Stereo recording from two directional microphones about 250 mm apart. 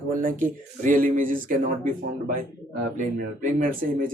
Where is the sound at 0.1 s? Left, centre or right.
Right.